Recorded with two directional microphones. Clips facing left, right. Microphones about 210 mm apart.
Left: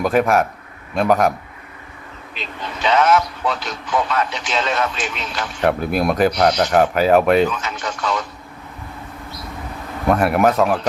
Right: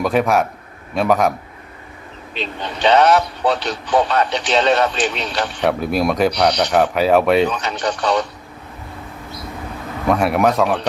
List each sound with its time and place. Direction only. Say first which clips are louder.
0.0 s speech: even; centre (ahead or behind)
2.3 s a man's voice: right 4 dB; 30° right (ahead or behind)
5.5 s speech: left 1 dB; centre (ahead or behind)
7.4 s a man's voice: right 2 dB; 35° right (ahead or behind)
10.1 s speech: even; centre (ahead or behind)